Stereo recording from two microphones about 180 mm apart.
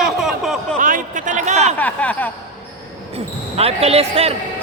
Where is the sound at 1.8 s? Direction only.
10° left (ahead or behind).